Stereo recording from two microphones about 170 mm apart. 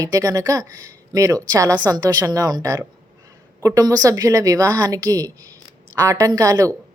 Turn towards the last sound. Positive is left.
turn(degrees=-20)  # may be behind; listen again after turning